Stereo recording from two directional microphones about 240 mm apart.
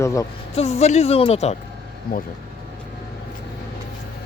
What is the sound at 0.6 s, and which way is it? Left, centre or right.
Speech, left.